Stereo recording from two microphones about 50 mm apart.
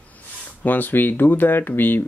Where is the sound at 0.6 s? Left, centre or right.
Left.